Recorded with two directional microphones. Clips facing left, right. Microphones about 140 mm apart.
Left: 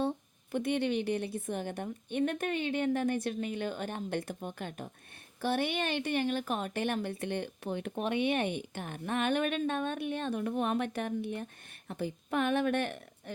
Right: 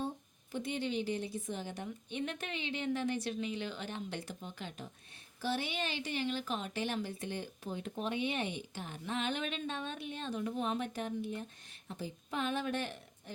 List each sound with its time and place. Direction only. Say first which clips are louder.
0.5 s a woman's voice: left 6 dB; 60° left (ahead or behind)